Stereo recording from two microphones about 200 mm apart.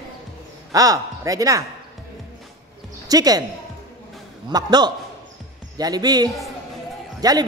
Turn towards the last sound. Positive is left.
turn(degrees=-20)  # may be behind; listen again after turning